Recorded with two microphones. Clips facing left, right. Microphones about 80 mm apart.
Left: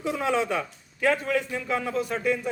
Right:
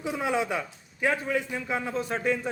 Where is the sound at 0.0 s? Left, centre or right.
Centre.